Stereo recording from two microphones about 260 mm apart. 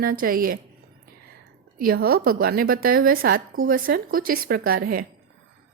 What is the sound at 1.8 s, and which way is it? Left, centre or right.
Speech, right.